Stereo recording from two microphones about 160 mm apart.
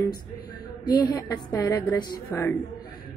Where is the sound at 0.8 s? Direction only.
25° left (ahead or behind).